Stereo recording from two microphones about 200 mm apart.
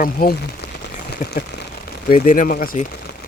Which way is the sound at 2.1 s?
40° left (ahead or behind).